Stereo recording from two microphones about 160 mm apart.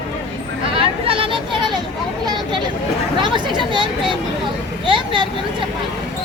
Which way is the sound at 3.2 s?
30° right (ahead or behind).